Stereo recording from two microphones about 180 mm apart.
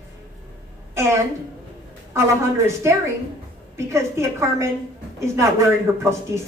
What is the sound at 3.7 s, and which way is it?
A man's voice, 15° right (ahead or behind).